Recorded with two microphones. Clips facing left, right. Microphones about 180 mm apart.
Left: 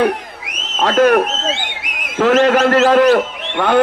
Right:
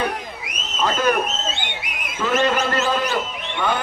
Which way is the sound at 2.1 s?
85° left.